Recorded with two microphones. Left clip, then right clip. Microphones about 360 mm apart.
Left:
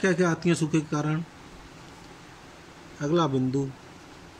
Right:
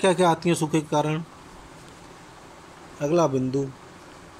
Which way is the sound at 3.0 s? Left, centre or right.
Centre.